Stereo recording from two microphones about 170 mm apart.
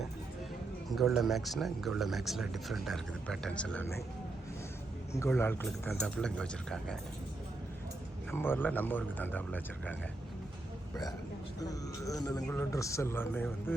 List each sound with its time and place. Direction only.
0.9 s speech: centre (ahead or behind)
5.2 s speech: 15° left (ahead or behind)
8.3 s speech: 15° left (ahead or behind)
11.6 s a man's voice: 20° left (ahead or behind)